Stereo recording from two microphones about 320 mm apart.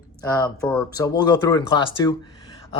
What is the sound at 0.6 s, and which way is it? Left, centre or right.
Speech, centre.